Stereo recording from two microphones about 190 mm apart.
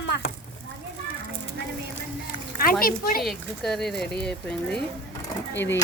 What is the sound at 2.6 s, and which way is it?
Speech, 50° left (ahead or behind).